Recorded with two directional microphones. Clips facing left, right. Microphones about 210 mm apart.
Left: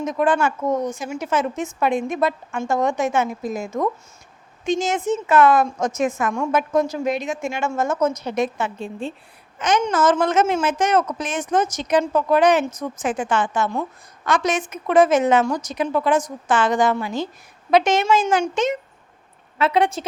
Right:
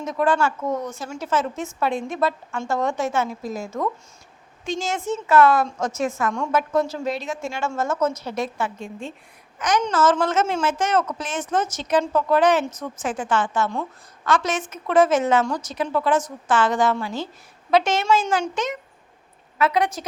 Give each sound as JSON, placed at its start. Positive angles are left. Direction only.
{"t": 0.0, "sound": "a woman's voice", "side_deg": 20}
{"t": 8.8, "sound": "a woman's voice", "side_deg": 35}